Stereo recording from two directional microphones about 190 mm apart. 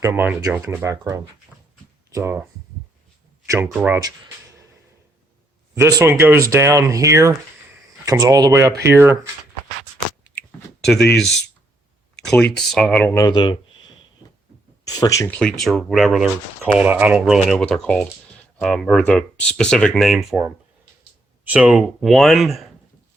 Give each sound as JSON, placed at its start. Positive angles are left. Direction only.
{"t": 0.0, "sound": "speech", "side_deg": -15}
{"t": 3.4, "sound": "speech", "side_deg": -15}
{"t": 5.8, "sound": "speech", "side_deg": -15}
{"t": 10.8, "sound": "a sound", "side_deg": 5}
{"t": 12.2, "sound": "speech", "side_deg": 5}
{"t": 14.8, "sound": "speech", "side_deg": 20}
{"t": 15.4, "sound": "speech", "side_deg": 0}